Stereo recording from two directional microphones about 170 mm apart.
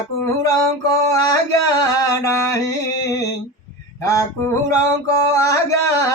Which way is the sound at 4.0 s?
20° left (ahead or behind).